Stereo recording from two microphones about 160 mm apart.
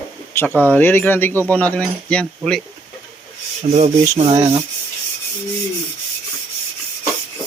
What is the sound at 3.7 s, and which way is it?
Rub, 40° right (ahead or behind).